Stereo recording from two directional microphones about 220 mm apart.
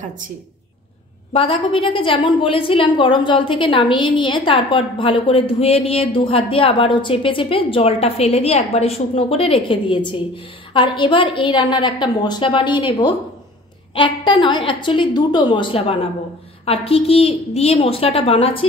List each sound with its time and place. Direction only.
1.3 s a woman's voice: 25° left (ahead or behind)